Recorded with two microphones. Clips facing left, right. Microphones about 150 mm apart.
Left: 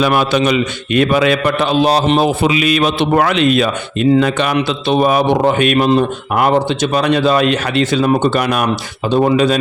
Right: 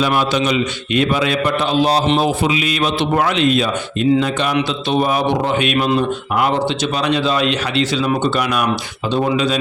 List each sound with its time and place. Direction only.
0.0 s a man's voice: 60° left (ahead or behind)
2.4 s a man's voice: 65° left (ahead or behind); by 5.9 s 50° left (ahead or behind)
6.9 s speech: 50° left (ahead or behind)